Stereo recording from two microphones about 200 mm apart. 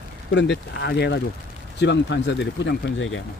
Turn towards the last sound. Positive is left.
turn(degrees=70)  # may be behind; listen again after turning